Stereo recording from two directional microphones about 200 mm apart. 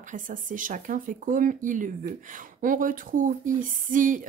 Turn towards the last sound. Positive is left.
turn(degrees=-40)  # may be behind; listen again after turning